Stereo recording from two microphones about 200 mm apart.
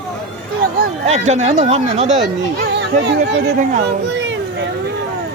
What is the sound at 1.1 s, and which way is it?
Speech, 35° right (ahead or behind).